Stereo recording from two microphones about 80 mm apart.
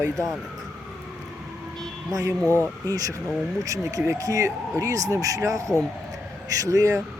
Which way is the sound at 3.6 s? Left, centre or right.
Right.